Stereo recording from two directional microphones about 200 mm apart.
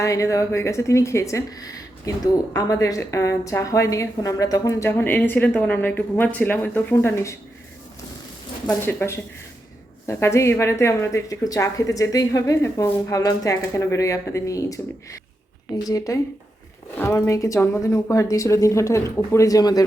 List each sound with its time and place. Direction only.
0.0 s a woman's voice: 15° left (ahead or behind)
8.6 s a woman's voice: 10° left (ahead or behind)